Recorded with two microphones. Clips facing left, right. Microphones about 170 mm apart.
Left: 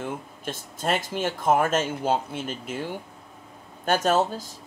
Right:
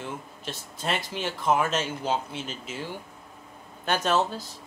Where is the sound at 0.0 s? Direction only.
50° left (ahead or behind).